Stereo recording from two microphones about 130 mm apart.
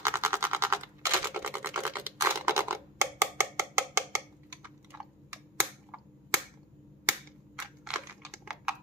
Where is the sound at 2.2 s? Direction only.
20° right (ahead or behind).